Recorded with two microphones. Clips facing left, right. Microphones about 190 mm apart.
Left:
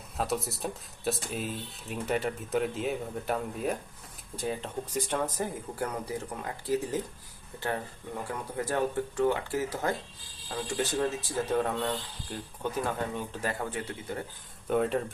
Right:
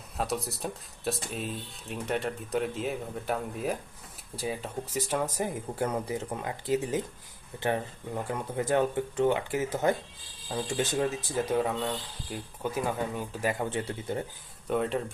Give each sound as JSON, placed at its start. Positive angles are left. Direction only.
{"t": 0.2, "sound": "speech", "side_deg": 0}
{"t": 5.8, "sound": "speech", "side_deg": -25}
{"t": 8.3, "sound": "speech", "side_deg": -20}
{"t": 13.7, "sound": "speech", "side_deg": -25}
{"t": 14.7, "sound": "speech", "side_deg": 0}